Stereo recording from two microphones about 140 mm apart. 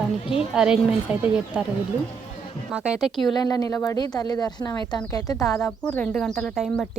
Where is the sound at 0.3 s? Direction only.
5° right (ahead or behind).